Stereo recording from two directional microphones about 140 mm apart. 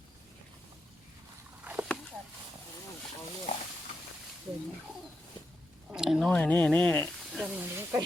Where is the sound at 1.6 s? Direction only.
10° right (ahead or behind).